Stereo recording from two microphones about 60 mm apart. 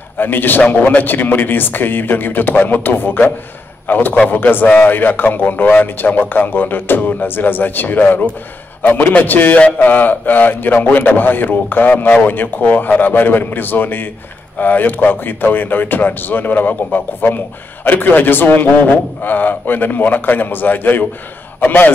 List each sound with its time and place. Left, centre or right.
0.2 s a man's voice: left